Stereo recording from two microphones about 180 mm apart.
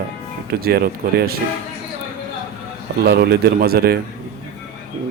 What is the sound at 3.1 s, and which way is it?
Speech, 60° right (ahead or behind).